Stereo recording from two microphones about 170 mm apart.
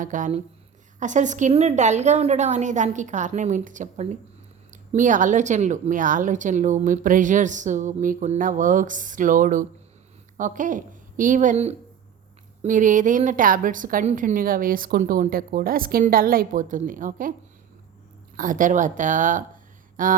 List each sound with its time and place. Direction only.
0.0 s a woman's voice: 50° right (ahead or behind)
18.3 s a woman's voice: 50° right (ahead or behind)